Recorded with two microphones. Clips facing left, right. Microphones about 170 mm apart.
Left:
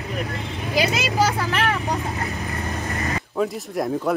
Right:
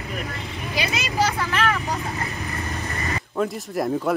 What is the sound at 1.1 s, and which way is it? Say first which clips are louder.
Speech: right 1 dB; 45° left (ahead or behind).